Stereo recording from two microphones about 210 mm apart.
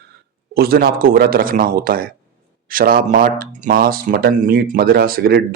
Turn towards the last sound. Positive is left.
turn(degrees=-45)  # may be behind; listen again after turning